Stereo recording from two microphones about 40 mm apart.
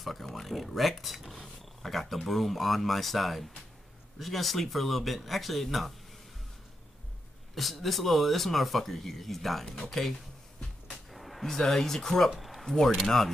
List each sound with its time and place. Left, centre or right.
0.0 s speech: centre
7.5 s speech: centre
11.1 s a sound: centre
11.4 s speech: centre
12.4 s a sound: centre
12.6 s speech: centre